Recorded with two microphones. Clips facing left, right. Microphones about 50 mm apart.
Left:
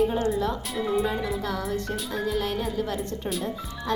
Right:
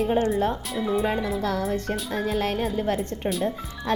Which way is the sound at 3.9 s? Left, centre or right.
Right.